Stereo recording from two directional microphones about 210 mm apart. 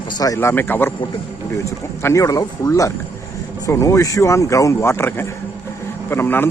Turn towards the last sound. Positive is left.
turn(degrees=10)  # may be behind; listen again after turning